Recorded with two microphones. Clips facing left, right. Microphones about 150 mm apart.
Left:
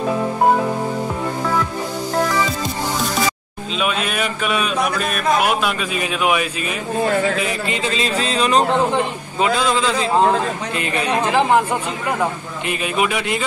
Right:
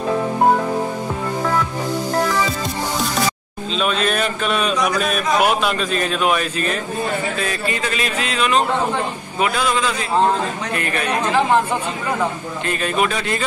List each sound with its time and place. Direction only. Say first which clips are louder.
2.2 s music: even; centre (ahead or behind)
3.7 s a man's voice: right 2 dB; 10° left (ahead or behind)
7.3 s a man's voice: left 1 dB; 20° left (ahead or behind)